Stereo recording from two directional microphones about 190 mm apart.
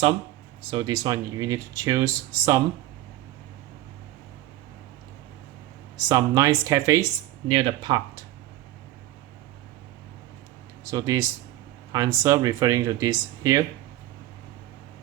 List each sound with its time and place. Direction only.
0.7 s speech: 20° right (ahead or behind)
6.1 s speech: 15° right (ahead or behind)
7.4 s speech: 30° right (ahead or behind)
10.8 s speech: 15° right (ahead or behind)